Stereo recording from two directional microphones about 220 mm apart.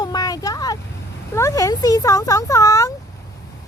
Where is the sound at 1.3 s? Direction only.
15° left (ahead or behind).